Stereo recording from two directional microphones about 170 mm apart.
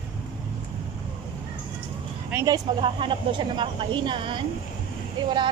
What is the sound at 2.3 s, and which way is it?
Speech, 20° right (ahead or behind).